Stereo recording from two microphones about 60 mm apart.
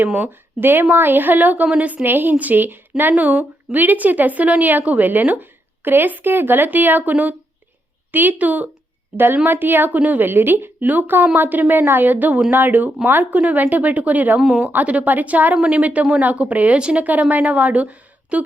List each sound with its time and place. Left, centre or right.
0.6 s a woman's voice: right
1.6 s speech: centre
1.9 s a woman's voice: right
14.4 s speech: centre
14.7 s a woman's voice: right